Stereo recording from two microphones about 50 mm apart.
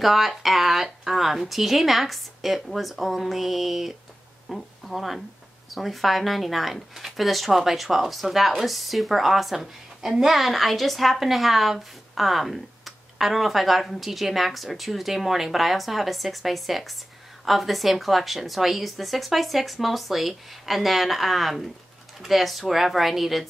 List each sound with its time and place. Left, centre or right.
0.0 s speech: centre